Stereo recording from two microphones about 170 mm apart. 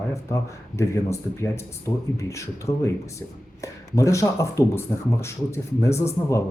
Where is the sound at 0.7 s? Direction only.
15° left (ahead or behind).